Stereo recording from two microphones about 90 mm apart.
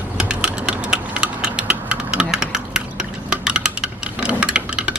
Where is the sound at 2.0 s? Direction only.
10° right (ahead or behind).